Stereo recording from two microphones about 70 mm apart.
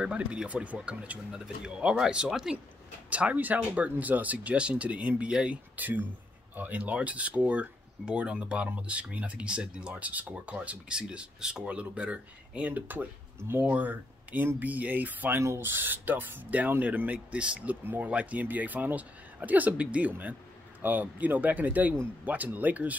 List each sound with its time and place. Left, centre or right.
0.0 s speech: centre
3.1 s speech: centre